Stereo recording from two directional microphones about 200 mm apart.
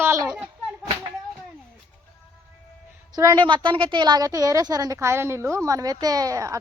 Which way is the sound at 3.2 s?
20° right (ahead or behind).